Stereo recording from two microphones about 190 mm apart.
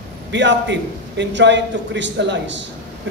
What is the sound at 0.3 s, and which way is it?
A woman's voice, 70° right (ahead or behind).